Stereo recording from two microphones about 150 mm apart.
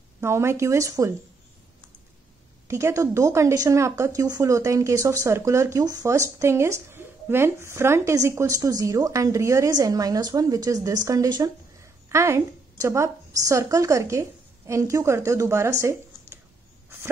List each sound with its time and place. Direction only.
0.2 s speech: 20° right (ahead or behind)
2.7 s a woman's voice: 20° right (ahead or behind)